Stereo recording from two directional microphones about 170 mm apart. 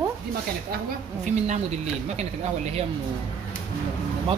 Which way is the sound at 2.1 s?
40° right (ahead or behind).